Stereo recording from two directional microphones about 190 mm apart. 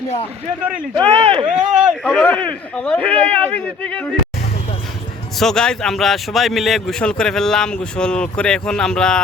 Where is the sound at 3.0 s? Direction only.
30° right (ahead or behind).